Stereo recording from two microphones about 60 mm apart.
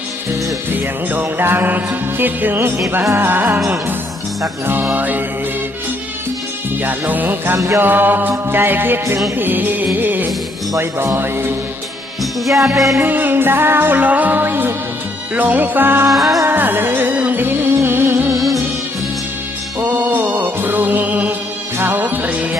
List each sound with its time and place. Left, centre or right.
0.7 s music: right
4.9 s music: right
6.8 s music: right
7.5 s music: right
7.8 s music: right
12.2 s music: centre
13.0 s music: right
16.1 s music: centre
16.4 s music: right
18.3 s music: centre
19.8 s music: right
21.7 s music: right